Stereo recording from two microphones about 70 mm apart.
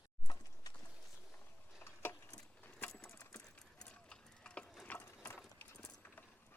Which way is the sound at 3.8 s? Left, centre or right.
Centre.